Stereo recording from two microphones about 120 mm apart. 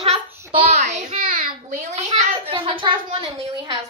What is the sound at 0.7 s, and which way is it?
A child's voice, 70° right (ahead or behind).